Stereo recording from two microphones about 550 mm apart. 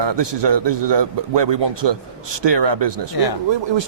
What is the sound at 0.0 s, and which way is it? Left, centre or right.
Speech, right.